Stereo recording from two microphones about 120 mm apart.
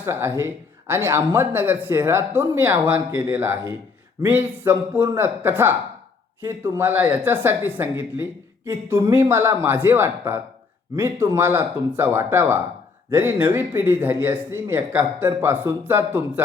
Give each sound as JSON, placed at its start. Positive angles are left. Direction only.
{"t": 0.0, "sound": "speech", "side_deg": -20}